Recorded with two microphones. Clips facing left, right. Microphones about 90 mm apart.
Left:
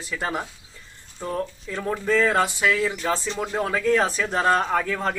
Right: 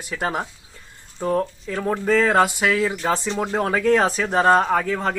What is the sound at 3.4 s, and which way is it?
Speech, 30° right (ahead or behind).